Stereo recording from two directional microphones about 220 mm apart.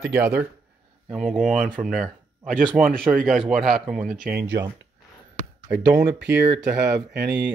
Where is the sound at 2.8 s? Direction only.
5° right (ahead or behind).